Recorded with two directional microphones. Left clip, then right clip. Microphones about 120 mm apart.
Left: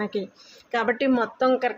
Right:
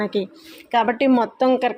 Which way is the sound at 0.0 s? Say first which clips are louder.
Right 5 dB; 45° right (ahead or behind).